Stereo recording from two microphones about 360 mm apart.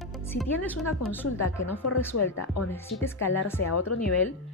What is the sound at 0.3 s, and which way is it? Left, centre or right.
A woman's voice, centre.